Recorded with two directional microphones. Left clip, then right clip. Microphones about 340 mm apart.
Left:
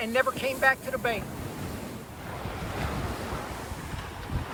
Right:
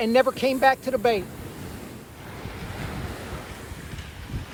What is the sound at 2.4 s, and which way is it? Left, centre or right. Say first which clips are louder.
Waves: left 2 dB; centre.